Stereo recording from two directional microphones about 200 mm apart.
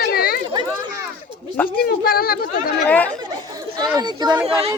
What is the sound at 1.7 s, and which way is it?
Speech, 50° left (ahead or behind).